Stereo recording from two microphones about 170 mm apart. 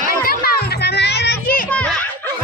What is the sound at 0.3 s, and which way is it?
Children playing, 65° left (ahead or behind).